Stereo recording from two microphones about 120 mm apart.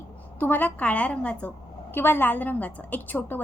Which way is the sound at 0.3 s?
15° left (ahead or behind).